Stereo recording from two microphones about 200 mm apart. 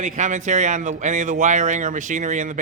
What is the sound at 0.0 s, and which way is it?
Speech, 40° right (ahead or behind).